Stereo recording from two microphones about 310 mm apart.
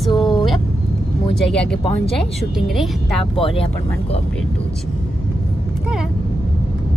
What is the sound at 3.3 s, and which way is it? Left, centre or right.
Speech, centre.